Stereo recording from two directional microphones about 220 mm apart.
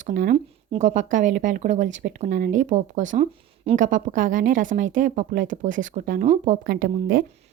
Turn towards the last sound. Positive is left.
turn(degrees=-40)  # may be behind; listen again after turning